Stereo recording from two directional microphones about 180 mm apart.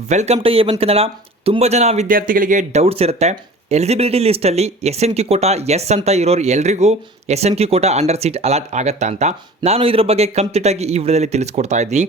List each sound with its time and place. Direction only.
0.1 s speech: 40° right (ahead or behind)
2.1 s speech: 50° right (ahead or behind)